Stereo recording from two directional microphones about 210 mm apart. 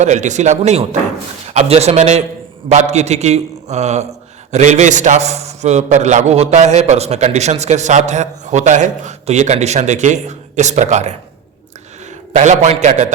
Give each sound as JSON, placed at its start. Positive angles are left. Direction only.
{"t": 0.0, "sound": "a man's voice", "side_deg": -35}
{"t": 12.3, "sound": "a man's voice", "side_deg": -35}